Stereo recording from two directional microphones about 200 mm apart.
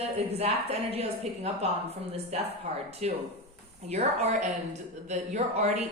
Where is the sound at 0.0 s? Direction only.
30° right (ahead or behind).